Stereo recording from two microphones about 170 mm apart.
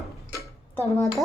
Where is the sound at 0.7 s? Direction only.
10° left (ahead or behind).